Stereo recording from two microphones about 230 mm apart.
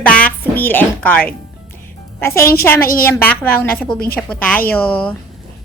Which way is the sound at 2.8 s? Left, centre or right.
Left.